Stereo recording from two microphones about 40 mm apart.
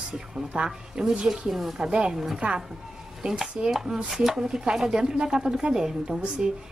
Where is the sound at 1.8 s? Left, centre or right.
Right.